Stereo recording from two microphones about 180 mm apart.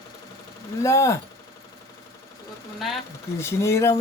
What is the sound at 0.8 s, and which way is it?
Speech, 15° left (ahead or behind).